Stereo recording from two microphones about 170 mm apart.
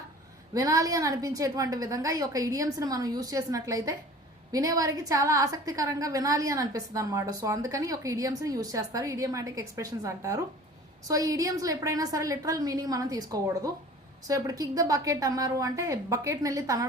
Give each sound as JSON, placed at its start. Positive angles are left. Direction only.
{"t": 0.5, "sound": "a woman's voice", "side_deg": -20}